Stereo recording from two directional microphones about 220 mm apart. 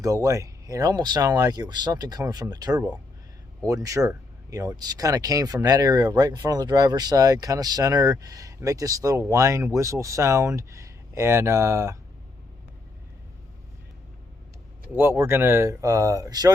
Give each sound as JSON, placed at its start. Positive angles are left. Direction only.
{"t": 0.0, "sound": "speech", "side_deg": -15}
{"t": 14.9, "sound": "speech", "side_deg": -10}